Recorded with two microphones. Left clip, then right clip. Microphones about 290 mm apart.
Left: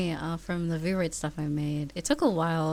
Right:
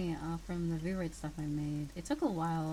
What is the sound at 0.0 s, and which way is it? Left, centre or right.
Speech, left.